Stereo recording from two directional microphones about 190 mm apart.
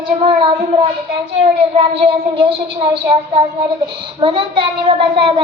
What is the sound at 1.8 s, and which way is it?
A child's voice, 30° right (ahead or behind).